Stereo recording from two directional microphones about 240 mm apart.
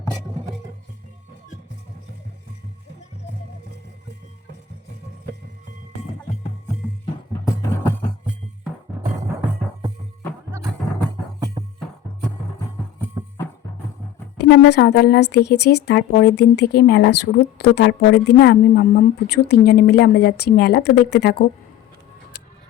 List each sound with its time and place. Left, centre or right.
7.0 s music: centre
14.4 s speech: left